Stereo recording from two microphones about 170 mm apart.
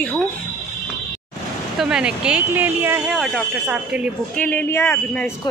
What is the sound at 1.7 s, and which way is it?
Speech, 5° right (ahead or behind).